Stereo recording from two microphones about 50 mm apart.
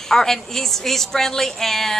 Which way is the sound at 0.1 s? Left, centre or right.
Centre.